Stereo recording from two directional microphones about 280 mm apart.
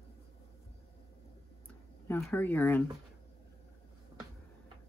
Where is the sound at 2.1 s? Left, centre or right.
Centre.